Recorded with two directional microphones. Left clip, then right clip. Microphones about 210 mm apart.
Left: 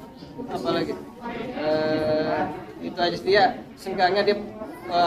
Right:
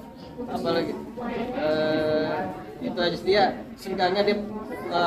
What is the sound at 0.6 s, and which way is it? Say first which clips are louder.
Speech: even; 5° left (ahead or behind).